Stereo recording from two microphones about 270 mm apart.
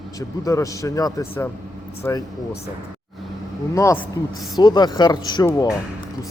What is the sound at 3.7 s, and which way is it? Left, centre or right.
Speech, centre.